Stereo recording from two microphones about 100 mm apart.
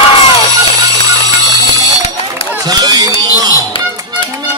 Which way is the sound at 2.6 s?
40° right (ahead or behind).